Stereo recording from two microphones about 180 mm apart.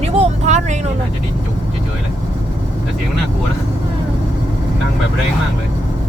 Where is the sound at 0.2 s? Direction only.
40° right (ahead or behind).